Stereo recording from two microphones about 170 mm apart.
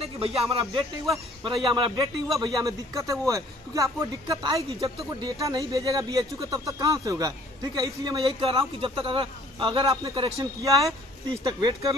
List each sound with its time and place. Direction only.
0.0 s a man's voice: 35° right (ahead or behind)
8.2 s a man's voice: 35° right (ahead or behind)